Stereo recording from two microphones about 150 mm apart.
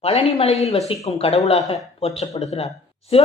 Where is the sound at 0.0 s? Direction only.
40° left (ahead or behind).